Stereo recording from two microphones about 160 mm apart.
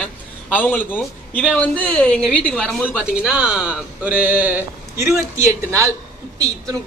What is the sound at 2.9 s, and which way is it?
A man's voice, 5° right (ahead or behind).